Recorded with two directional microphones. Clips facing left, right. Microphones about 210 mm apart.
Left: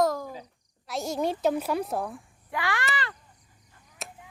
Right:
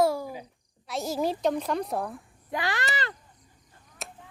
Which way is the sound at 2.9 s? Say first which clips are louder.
Right 1 dB; 25° right (ahead or behind).